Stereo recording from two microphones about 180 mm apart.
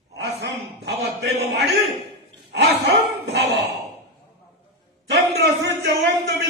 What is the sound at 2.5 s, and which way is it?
Bow-wow, 75° right (ahead or behind).